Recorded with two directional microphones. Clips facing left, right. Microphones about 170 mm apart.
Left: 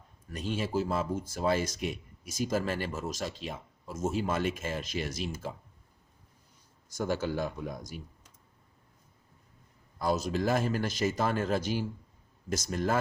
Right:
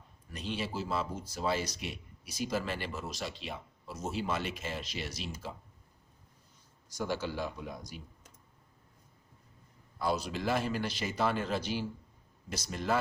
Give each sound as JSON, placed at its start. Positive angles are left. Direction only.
{"t": 0.3, "sound": "speech", "side_deg": 45}
{"t": 6.9, "sound": "speech", "side_deg": 45}
{"t": 10.0, "sound": "speech", "side_deg": 45}